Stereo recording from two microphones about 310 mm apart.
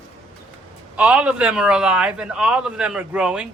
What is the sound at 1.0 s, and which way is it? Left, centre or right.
A man's voice, centre.